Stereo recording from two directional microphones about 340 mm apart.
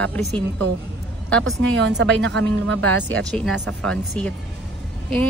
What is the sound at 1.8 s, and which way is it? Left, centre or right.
Speech, right.